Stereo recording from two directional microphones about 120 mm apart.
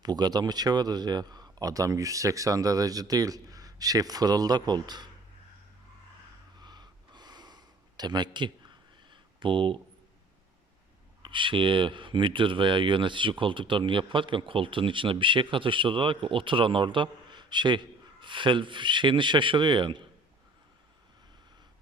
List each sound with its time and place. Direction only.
0.0 s speech: 35° right (ahead or behind)
6.6 s gasp: 35° right (ahead or behind)
11.2 s speech: 45° right (ahead or behind)